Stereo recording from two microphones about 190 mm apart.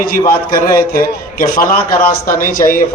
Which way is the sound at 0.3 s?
50° left (ahead or behind).